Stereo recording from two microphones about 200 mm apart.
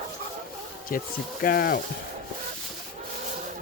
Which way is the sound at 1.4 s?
45° left (ahead or behind).